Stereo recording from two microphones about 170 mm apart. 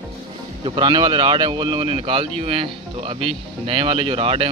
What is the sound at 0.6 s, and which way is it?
Speech, 25° right (ahead or behind).